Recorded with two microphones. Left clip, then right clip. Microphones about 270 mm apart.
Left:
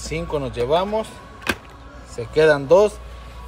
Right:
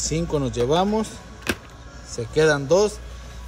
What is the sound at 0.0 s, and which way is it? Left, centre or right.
Speech, centre.